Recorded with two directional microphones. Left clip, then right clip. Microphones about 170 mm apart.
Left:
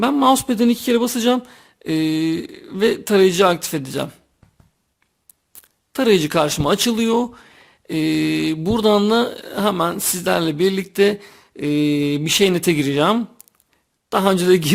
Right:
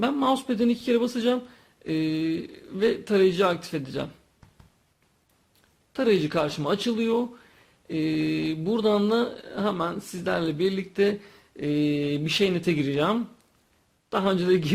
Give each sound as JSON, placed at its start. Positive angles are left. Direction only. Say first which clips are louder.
{"t": 0.0, "sound": "speech", "louder": "left 9 dB", "side_deg": 40}
{"t": 5.9, "sound": "speech", "louder": "left 7 dB", "side_deg": 45}